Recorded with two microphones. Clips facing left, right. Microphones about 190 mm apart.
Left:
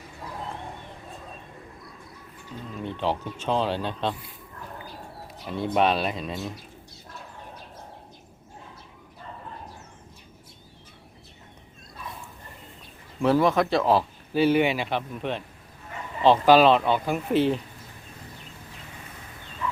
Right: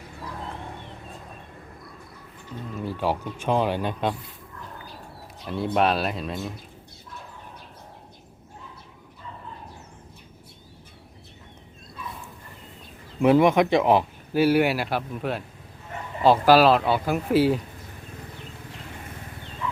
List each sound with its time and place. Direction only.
2.7 s speech: 5° right (ahead or behind)
5.5 s speech: centre (ahead or behind)
13.2 s speech: 20° right (ahead or behind)
14.4 s speech: 5° right (ahead or behind)